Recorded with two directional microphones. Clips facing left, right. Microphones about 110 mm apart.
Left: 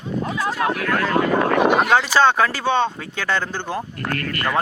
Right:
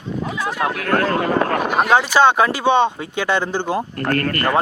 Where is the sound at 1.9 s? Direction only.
15° right (ahead or behind).